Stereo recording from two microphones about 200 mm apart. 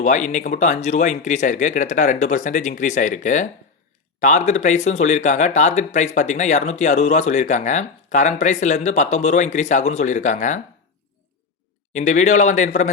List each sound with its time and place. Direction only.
0.0 s speech: 40° left (ahead or behind)
11.9 s speech: 35° left (ahead or behind)